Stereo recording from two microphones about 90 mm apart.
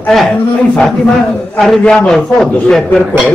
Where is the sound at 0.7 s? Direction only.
10° left (ahead or behind).